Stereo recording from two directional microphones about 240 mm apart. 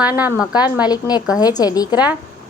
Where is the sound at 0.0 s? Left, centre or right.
Centre.